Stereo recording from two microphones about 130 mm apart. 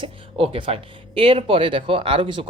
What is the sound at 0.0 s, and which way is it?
Speech, 45° right (ahead or behind).